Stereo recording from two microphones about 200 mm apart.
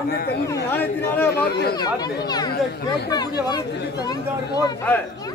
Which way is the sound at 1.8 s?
20° left (ahead or behind).